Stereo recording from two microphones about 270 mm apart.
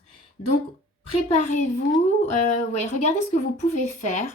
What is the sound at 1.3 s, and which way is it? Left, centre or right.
A woman's voice, left.